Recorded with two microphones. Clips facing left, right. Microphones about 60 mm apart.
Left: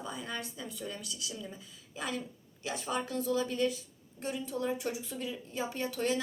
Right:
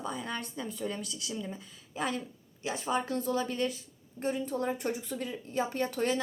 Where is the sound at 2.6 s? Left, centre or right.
Right.